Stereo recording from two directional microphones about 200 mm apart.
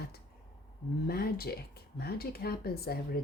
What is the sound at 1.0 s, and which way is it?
Speech, 50° left (ahead or behind).